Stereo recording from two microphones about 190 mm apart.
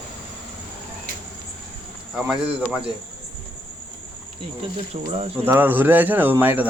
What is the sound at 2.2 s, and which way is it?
Speech, 5° right (ahead or behind).